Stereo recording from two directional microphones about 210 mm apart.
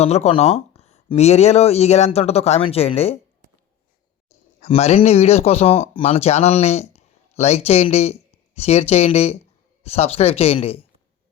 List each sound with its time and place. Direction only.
0.0 s speech: 30° left (ahead or behind)
4.6 s speech: 30° left (ahead or behind)